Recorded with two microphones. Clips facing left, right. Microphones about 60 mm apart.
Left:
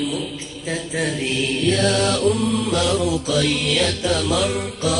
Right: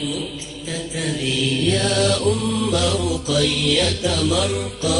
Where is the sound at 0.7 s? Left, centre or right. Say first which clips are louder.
Left 3 dB; left.